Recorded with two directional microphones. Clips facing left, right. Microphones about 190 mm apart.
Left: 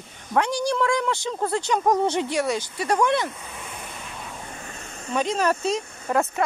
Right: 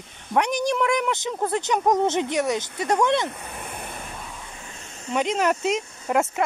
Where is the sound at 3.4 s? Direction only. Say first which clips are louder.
Right 2 dB; 55° right (ahead or behind).